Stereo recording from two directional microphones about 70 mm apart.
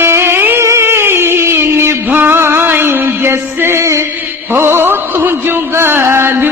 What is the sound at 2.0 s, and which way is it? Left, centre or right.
Music, right.